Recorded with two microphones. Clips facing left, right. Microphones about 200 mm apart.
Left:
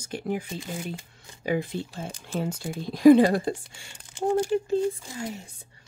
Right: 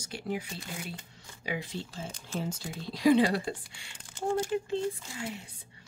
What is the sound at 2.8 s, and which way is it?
Speech, 50° left (ahead or behind).